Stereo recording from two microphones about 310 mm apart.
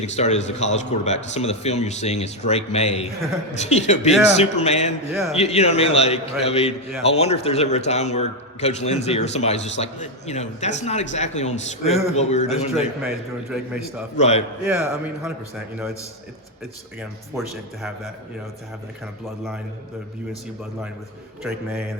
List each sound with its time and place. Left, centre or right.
0.0 s a man's voice: left
12.7 s speech: centre
14.2 s a man's voice: left
14.6 s speech: centre
17.0 s speech: centre
21.4 s a man's voice: centre